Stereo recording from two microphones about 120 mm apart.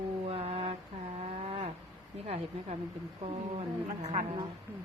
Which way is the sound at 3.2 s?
60° right (ahead or behind).